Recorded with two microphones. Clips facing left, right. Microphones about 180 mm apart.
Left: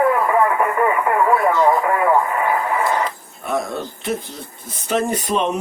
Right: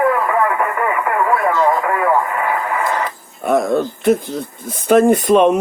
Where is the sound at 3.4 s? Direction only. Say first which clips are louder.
Right 8 dB; 50° right (ahead or behind).